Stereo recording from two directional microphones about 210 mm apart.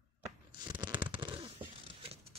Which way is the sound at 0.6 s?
20° right (ahead or behind).